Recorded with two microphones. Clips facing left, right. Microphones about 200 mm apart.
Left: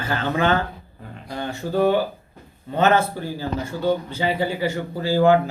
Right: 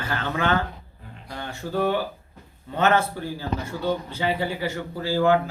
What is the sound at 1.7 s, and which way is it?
Speech, 40° left (ahead or behind).